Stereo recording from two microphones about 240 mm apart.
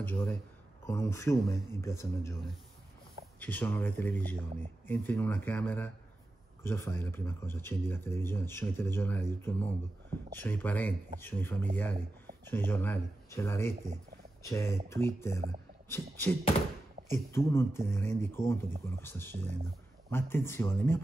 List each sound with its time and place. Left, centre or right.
0.0 s speech: centre
3.3 s speech: centre